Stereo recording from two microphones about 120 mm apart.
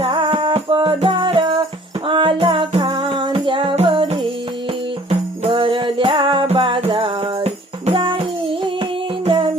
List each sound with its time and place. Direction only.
0.0 s music: 45° right (ahead or behind)
5.0 s music: 55° right (ahead or behind)